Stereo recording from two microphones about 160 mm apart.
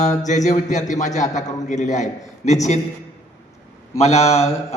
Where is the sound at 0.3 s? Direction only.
50° left (ahead or behind).